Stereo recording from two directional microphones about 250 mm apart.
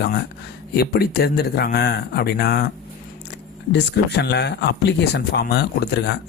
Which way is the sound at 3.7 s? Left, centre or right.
Left.